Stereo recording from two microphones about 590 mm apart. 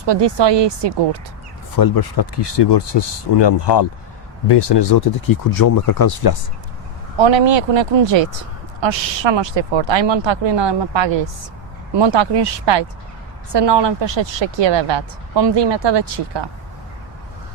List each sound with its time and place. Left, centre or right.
0.0 s speech: right
1.7 s speech: left
7.2 s speech: right